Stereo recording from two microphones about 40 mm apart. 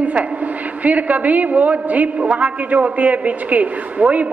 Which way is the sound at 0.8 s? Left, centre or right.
Right.